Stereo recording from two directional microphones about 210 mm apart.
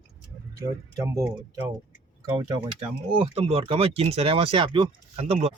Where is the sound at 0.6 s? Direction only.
15° right (ahead or behind).